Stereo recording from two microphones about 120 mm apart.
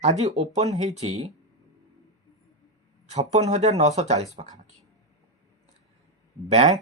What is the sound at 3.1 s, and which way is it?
Speech, 65° right (ahead or behind).